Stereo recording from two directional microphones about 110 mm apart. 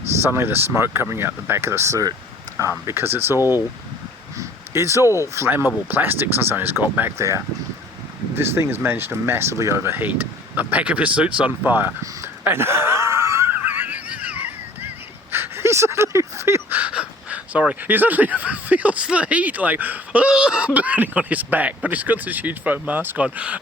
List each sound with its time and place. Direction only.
0.2 s speech: 20° right (ahead or behind)
4.4 s a sound: 25° right (ahead or behind)
5.0 s speech: 30° left (ahead or behind)
5.3 s speech: 20° right (ahead or behind)
7.2 s speech: 25° right (ahead or behind)